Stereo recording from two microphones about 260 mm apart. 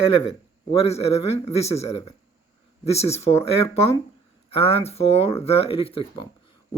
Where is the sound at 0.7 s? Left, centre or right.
Left.